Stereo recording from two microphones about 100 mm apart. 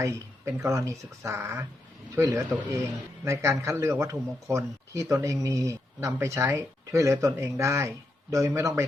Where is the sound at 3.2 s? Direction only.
30° right (ahead or behind).